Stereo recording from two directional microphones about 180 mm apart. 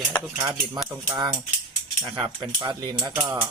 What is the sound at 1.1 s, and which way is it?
Speech, 20° right (ahead or behind).